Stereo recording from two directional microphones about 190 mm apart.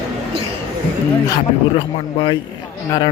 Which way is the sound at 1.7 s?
25° left (ahead or behind).